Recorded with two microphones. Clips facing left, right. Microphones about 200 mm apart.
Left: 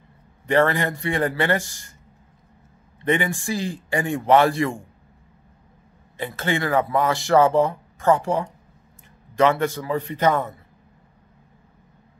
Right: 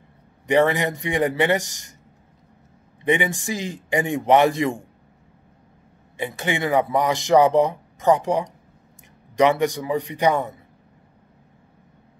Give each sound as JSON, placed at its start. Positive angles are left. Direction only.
{"t": 0.5, "sound": "speech", "side_deg": -15}
{"t": 3.1, "sound": "speech", "side_deg": -15}
{"t": 6.1, "sound": "speech", "side_deg": -15}